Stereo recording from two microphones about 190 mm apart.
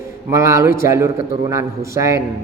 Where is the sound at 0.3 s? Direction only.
15° right (ahead or behind).